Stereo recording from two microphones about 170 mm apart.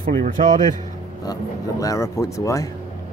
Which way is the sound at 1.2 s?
20° left (ahead or behind).